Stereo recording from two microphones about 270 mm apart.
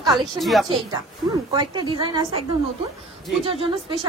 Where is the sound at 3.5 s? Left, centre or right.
Centre.